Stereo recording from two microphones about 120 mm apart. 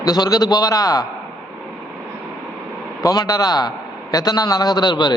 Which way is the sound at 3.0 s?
30° left (ahead or behind).